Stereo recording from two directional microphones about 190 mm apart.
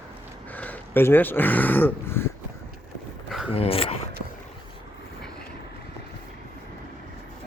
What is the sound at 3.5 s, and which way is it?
Speech, 30° left (ahead or behind).